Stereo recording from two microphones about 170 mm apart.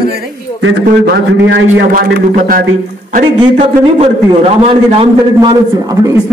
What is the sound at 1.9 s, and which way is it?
Speech, 55° right (ahead or behind).